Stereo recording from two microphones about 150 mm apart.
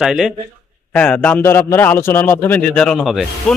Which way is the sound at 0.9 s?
10° left (ahead or behind).